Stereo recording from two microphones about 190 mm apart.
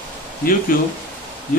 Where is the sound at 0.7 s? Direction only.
50° left (ahead or behind).